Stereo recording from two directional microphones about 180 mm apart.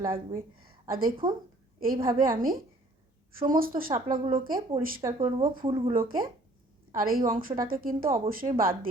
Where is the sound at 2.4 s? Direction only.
55° right (ahead or behind).